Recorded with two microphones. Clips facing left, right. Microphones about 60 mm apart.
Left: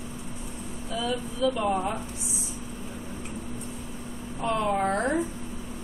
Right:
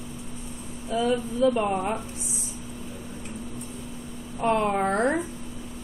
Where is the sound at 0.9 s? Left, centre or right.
Right.